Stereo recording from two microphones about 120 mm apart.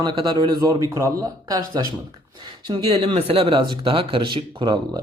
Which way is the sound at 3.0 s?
55° right (ahead or behind).